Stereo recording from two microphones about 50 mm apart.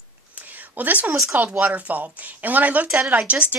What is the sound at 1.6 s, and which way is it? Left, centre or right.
Speech, right.